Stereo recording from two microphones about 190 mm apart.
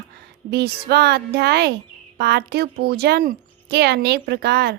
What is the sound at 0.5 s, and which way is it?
A woman's voice, 55° right (ahead or behind).